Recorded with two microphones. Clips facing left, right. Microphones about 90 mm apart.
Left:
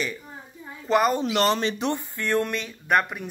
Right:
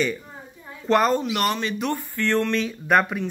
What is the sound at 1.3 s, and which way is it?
Speech, 30° left (ahead or behind).